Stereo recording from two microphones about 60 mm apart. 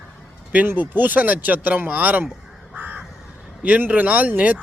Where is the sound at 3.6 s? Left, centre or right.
Right.